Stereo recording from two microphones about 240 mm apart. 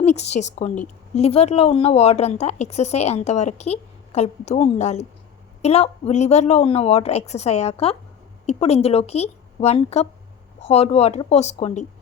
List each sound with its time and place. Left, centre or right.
0.0 s a woman's voice: left